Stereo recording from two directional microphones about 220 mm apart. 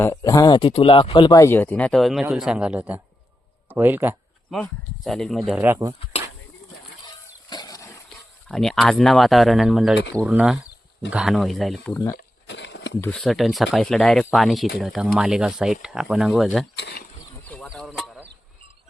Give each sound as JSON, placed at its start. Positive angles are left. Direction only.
{"t": 0.0, "sound": "speech", "side_deg": 15}
{"t": 4.5, "sound": "speech", "side_deg": 0}
{"t": 7.5, "sound": "horse", "side_deg": 15}
{"t": 8.4, "sound": "speech", "side_deg": 0}
{"t": 12.1, "sound": "a sound", "side_deg": 50}
{"t": 13.0, "sound": "speech", "side_deg": 5}
{"t": 16.7, "sound": "speech", "side_deg": 45}
{"t": 17.4, "sound": "a sound", "side_deg": 5}